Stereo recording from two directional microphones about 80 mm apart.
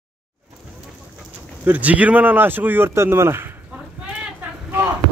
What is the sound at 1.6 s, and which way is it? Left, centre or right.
A man's voice, centre.